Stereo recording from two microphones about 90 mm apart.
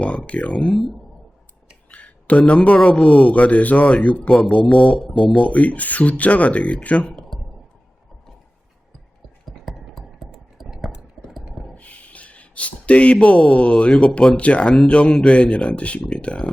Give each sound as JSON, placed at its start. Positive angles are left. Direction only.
{"t": 0.0, "sound": "speech", "side_deg": 10}
{"t": 1.9, "sound": "a man's voice", "side_deg": 15}
{"t": 9.5, "sound": "a sound", "side_deg": 0}
{"t": 11.7, "sound": "speech", "side_deg": 15}